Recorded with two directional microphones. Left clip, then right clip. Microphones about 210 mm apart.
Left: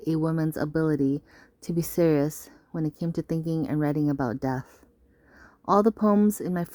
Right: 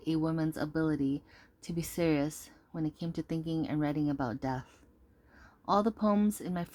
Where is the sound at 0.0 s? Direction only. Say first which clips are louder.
Left 5 dB; 50° left (ahead or behind).